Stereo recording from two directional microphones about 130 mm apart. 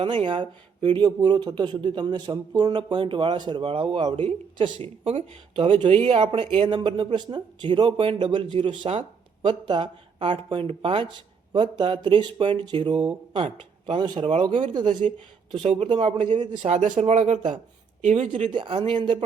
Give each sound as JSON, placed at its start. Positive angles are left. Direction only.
{"t": 0.0, "sound": "speech", "side_deg": -40}
{"t": 15.6, "sound": "speech", "side_deg": -50}
{"t": 16.6, "sound": "speech", "side_deg": -65}
{"t": 18.5, "sound": "speech", "side_deg": -35}